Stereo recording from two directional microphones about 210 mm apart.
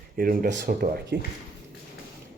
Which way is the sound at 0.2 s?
40° right (ahead or behind).